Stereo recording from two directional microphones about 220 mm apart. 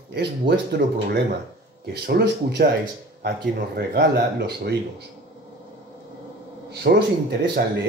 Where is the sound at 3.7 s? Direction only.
45° right (ahead or behind).